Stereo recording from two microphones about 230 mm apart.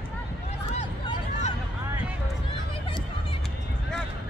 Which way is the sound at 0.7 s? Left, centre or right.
Left.